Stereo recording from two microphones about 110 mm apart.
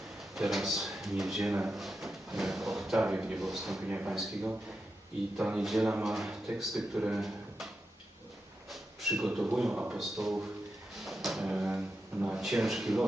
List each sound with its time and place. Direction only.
0.3 s speech: centre (ahead or behind)
3.8 s speech: 15° right (ahead or behind)
4.1 s speech: 5° right (ahead or behind)
8.7 s speech: centre (ahead or behind)
11.0 s a sound: centre (ahead or behind)
11.4 s speech: 10° right (ahead or behind)